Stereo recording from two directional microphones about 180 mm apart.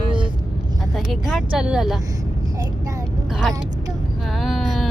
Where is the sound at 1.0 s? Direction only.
5° right (ahead or behind).